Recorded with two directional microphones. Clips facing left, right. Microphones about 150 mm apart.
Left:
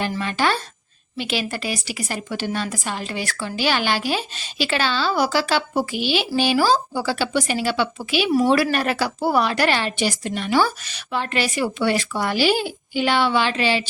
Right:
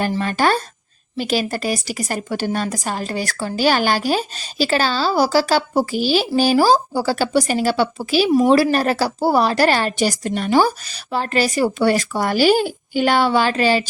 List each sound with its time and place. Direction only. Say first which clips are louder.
0.2 s a woman's voice: right 4 dB; 45° right (ahead or behind)